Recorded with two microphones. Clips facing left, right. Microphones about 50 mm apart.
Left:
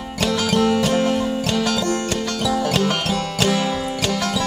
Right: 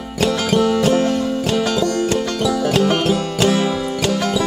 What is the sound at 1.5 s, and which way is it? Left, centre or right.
Music, centre.